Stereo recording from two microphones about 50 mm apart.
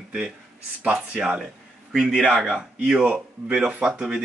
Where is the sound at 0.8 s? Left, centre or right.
Right.